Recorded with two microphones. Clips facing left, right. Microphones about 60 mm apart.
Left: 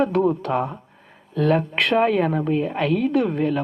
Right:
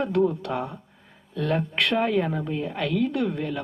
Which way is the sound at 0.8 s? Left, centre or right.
Left.